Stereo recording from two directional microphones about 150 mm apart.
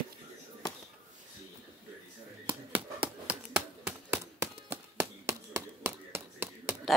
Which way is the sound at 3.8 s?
15° right (ahead or behind).